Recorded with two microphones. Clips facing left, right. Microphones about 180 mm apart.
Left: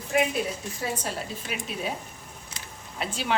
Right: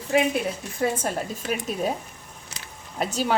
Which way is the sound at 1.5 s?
45° right (ahead or behind).